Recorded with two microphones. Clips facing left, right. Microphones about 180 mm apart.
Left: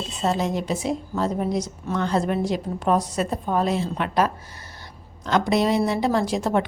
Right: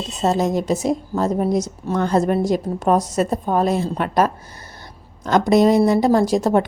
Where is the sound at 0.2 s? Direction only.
40° right (ahead or behind).